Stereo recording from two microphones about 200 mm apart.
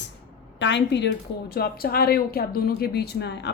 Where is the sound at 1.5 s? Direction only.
50° left (ahead or behind).